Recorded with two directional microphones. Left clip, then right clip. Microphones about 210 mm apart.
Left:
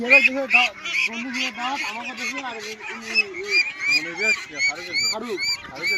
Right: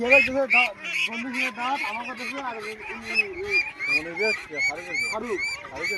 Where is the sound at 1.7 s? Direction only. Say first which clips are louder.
Left 1 dB; 5° right (ahead or behind).